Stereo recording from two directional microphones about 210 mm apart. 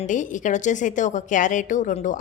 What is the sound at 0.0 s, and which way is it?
A woman's voice, 40° left (ahead or behind).